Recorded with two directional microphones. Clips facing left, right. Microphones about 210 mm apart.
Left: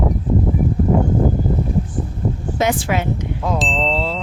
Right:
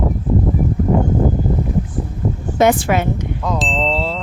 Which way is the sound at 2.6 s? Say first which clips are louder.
Right 5 dB; 55° right (ahead or behind).